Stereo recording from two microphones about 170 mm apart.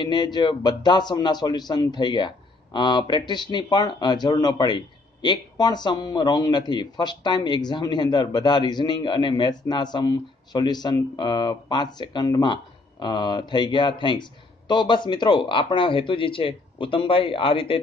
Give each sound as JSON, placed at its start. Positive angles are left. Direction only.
{"t": 0.0, "sound": "speech", "side_deg": 25}